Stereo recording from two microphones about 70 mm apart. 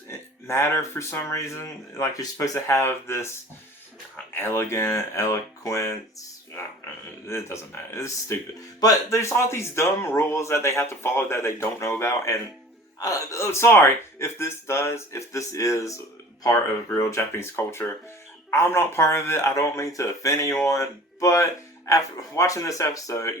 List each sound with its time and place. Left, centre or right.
0.1 s speech: left
4.4 s speech: left
7.3 s speech: left
13.0 s speech: left
13.4 s speech: left
16.4 s speech: left